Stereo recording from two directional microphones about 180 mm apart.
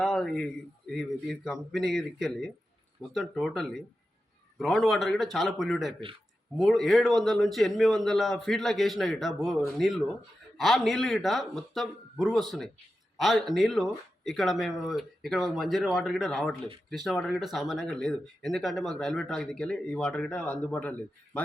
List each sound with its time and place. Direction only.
0.0 s speech: centre (ahead or behind)